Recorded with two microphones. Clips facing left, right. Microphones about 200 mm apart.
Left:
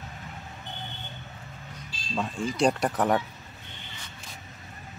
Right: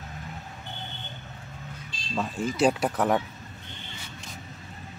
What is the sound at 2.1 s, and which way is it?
Speech, 5° right (ahead or behind).